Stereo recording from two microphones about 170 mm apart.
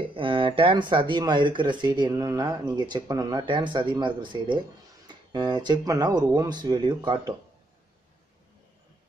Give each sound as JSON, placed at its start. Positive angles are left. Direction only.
{"t": 0.1, "sound": "speech", "side_deg": -30}